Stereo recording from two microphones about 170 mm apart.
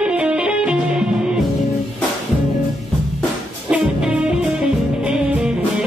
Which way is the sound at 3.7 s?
5° right (ahead or behind).